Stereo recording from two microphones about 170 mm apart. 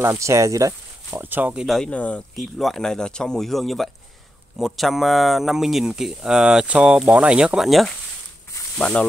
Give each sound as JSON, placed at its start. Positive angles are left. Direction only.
{"t": 0.0, "sound": "speech", "side_deg": -15}